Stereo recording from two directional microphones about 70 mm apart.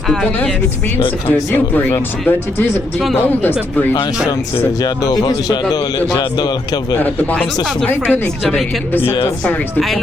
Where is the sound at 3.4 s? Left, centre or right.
Left.